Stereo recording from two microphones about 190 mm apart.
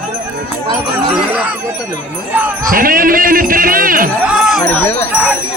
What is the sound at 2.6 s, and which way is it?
Speech, 50° right (ahead or behind).